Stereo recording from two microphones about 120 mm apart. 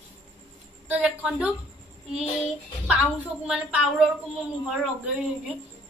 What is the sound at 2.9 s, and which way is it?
A woman's voice, 10° right (ahead or behind).